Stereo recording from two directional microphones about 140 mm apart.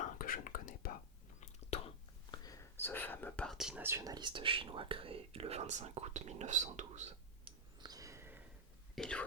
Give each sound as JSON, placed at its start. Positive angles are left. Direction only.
{"t": 0.0, "sound": "whispering", "side_deg": 80}
{"t": 1.7, "sound": "whispering", "side_deg": 50}
{"t": 2.3, "sound": "whispering", "side_deg": 25}
{"t": 3.8, "sound": "speech", "side_deg": -20}
{"t": 7.4, "sound": "a sound", "side_deg": -30}
{"t": 9.0, "sound": "whispering", "side_deg": 5}